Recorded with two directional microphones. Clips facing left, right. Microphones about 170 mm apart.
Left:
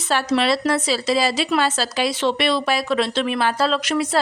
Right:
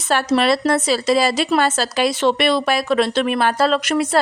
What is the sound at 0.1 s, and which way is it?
A woman's voice, 50° right (ahead or behind).